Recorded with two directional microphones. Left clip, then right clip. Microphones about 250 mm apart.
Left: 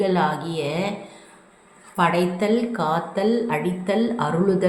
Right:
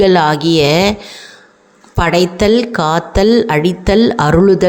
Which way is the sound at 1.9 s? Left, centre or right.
Right.